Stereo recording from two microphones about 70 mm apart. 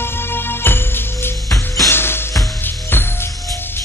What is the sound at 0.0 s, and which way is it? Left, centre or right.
Music, left.